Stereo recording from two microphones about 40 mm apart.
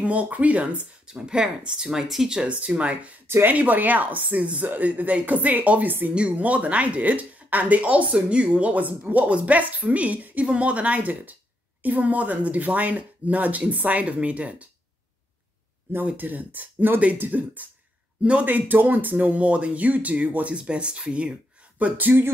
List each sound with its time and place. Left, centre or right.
0.0 s speech: right
1.0 s speech: right
2.8 s speech: right
3.5 s speech: right
10.4 s speech: right
16.2 s speech: right
19.3 s speech: right
20.5 s speech: right
21.7 s speech: right